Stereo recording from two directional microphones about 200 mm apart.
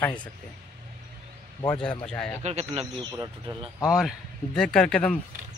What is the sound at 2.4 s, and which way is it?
Speech, 35° right (ahead or behind).